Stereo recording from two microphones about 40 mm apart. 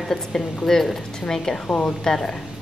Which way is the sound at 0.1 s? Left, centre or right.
Centre.